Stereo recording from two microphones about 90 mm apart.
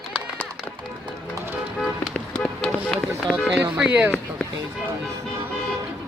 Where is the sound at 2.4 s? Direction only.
5° left (ahead or behind).